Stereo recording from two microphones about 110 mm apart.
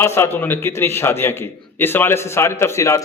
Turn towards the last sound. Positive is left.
turn(degrees=25)  # may be behind; listen again after turning